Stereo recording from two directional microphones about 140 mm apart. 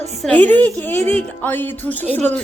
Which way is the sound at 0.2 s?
10° left (ahead or behind).